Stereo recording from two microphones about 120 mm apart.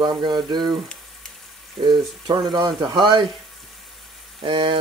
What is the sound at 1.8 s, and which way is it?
Speech, 35° right (ahead or behind).